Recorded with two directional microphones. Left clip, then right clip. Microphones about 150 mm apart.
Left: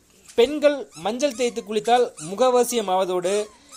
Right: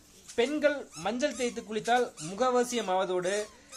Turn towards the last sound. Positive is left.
turn(degrees=35)  # may be behind; listen again after turning